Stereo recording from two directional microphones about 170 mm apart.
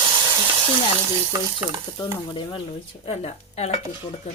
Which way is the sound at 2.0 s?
30° left (ahead or behind).